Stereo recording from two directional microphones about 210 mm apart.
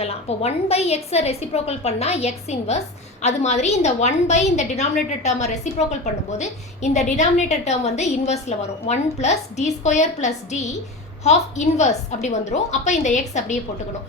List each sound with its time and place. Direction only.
0.0 s a woman's voice: 30° left (ahead or behind)